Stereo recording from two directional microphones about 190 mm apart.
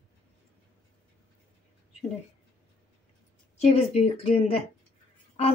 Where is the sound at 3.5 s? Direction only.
35° left (ahead or behind).